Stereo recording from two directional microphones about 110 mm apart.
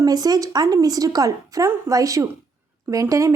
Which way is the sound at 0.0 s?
35° right (ahead or behind).